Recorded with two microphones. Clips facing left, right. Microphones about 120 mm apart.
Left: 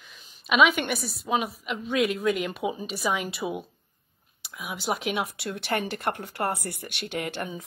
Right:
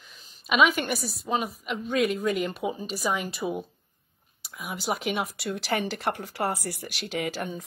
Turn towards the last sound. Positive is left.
turn(degrees=0)  # may be behind; listen again after turning